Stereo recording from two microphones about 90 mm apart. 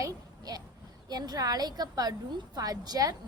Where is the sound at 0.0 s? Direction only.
45° right (ahead or behind).